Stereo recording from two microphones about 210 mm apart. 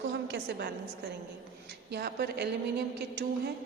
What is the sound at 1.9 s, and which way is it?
A woman's voice, 50° right (ahead or behind).